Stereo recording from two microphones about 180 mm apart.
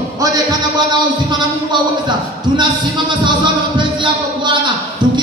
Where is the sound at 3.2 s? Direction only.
25° right (ahead or behind).